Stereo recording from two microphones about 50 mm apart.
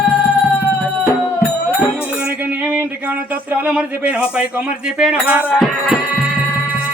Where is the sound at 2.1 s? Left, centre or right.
Right.